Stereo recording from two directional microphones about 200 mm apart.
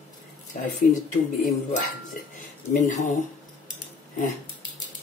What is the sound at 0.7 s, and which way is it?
Speech, 40° left (ahead or behind).